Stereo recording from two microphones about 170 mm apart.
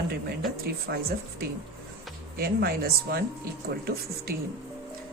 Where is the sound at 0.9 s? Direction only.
85° right.